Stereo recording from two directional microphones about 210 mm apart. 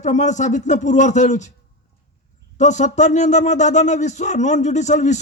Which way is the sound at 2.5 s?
35° left (ahead or behind).